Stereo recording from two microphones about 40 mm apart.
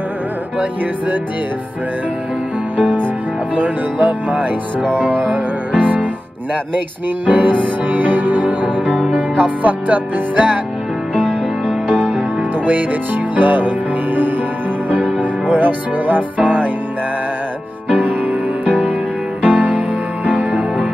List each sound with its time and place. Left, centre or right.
2.8 s music: right
5.8 s music: right
7.2 s music: right
12.6 s music: right
17.9 s music: right